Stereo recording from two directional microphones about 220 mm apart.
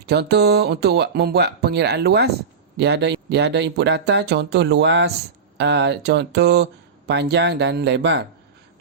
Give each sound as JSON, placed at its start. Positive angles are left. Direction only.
{"t": 0.0, "sound": "speech", "side_deg": -50}